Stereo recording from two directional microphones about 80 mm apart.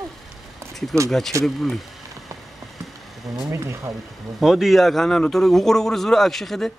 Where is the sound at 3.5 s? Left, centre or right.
Right.